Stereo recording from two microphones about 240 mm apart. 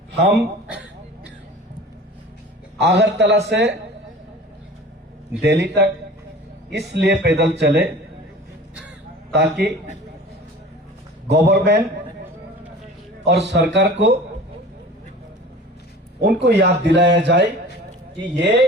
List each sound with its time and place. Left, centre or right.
2.8 s speech: right
5.4 s speech: right
9.3 s speech: right
11.3 s speech: right
13.2 s speech: right
16.2 s speech: right